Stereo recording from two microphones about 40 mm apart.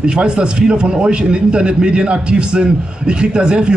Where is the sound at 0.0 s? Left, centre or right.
Right.